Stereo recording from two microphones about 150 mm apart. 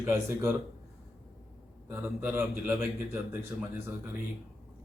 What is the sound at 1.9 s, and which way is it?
A man's voice, 15° right (ahead or behind).